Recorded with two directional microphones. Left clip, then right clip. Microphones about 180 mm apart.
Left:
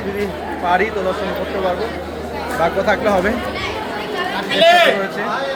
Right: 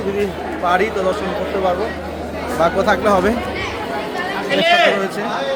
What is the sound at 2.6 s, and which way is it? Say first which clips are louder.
Speech: right 1 dB; 15° right (ahead or behind).